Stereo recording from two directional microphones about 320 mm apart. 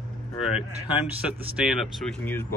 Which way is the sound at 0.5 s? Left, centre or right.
Centre.